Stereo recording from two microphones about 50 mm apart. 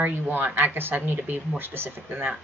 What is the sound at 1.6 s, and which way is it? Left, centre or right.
Speech, right.